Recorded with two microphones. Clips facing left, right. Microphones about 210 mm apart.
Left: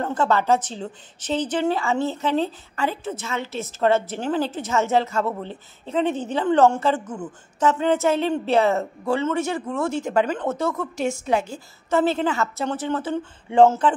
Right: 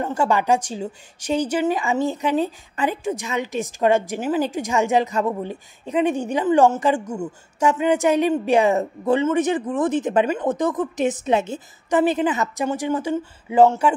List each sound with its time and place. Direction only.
0.0 s a woman's voice: 10° right (ahead or behind)